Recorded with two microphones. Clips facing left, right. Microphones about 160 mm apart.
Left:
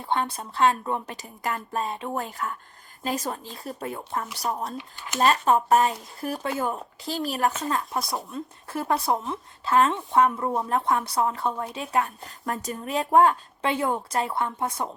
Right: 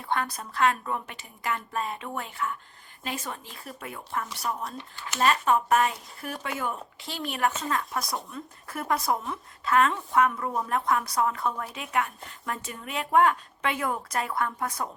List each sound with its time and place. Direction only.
0.0 s a woman's voice: 30° left (ahead or behind)